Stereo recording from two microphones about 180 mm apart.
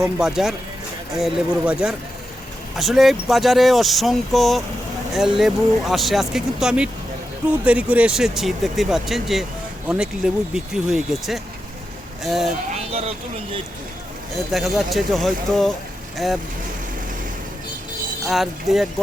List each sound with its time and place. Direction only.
0.0 s speech: 5° right (ahead or behind)
12.7 s speech: 35° right (ahead or behind)
14.5 s speech: centre (ahead or behind)
18.3 s speech: centre (ahead or behind)